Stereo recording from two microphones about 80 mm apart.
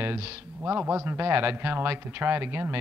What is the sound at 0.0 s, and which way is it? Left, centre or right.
Speech, right.